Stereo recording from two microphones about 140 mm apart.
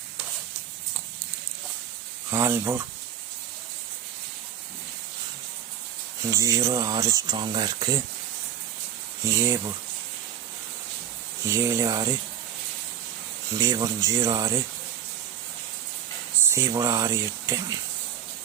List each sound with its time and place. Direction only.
2.3 s speech: 20° right (ahead or behind)
6.3 s speech: 25° right (ahead or behind)
9.2 s speech: 25° right (ahead or behind)
11.4 s speech: 20° right (ahead or behind)
13.6 s speech: 25° right (ahead or behind)
16.5 s speech: 20° right (ahead or behind)